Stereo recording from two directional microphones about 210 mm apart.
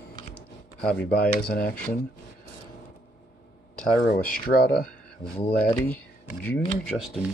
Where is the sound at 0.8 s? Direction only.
5° left (ahead or behind).